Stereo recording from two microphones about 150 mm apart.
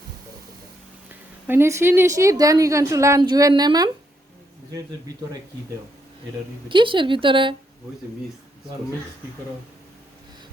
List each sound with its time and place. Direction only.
1.5 s a woman's voice: 15° right (ahead or behind)
6.7 s speech: 35° right (ahead or behind)